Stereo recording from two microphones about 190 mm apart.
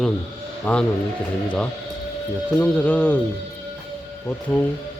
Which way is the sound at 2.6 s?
5° left (ahead or behind).